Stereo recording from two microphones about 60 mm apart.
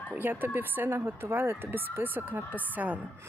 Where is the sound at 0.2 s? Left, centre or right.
Right.